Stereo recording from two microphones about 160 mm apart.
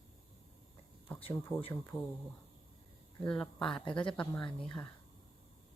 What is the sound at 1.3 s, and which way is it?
Speech, 15° left (ahead or behind).